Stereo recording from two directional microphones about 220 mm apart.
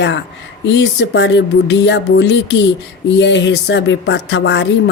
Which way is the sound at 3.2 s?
55° left (ahead or behind).